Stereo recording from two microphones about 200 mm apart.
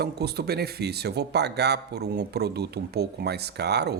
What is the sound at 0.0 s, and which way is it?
Speech, 55° right (ahead or behind).